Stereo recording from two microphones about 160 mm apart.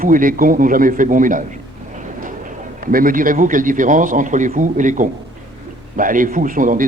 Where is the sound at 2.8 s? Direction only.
60° right (ahead or behind).